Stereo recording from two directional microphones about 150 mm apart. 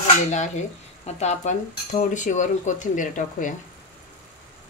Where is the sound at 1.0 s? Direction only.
50° left (ahead or behind).